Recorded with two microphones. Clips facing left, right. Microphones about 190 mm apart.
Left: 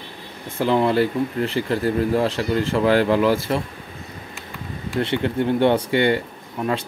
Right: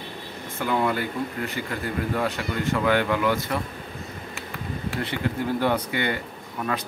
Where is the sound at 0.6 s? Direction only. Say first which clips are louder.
Left 7 dB; 30° left (ahead or behind).